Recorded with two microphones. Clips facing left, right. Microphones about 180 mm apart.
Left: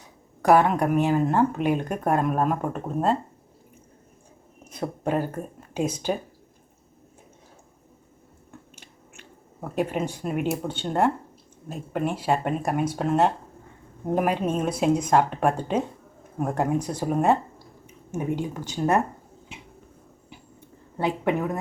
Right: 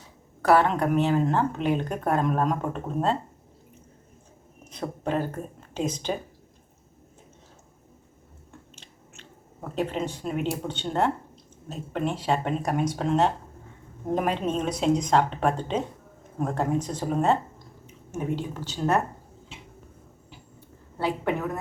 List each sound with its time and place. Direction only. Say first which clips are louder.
0.4 s speech: left 2 dB; 10° left (ahead or behind)
4.7 s speech: left 2 dB; 10° left (ahead or behind)
8.7 s speech: left 1 dB; 10° left (ahead or behind)
20.6 s a sound: left 2 dB; 20° left (ahead or behind)